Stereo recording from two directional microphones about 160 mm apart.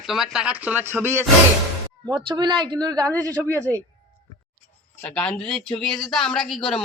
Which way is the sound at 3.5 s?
10° left (ahead or behind).